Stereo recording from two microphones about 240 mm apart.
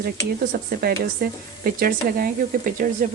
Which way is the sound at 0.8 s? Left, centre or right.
Right.